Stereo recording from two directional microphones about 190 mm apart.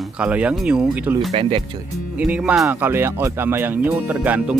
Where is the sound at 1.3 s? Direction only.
30° right (ahead or behind).